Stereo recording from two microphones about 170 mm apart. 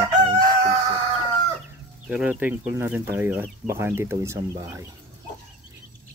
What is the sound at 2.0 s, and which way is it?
Speech, 10° right (ahead or behind).